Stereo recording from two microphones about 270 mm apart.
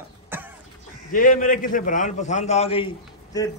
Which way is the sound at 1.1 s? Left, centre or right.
Left.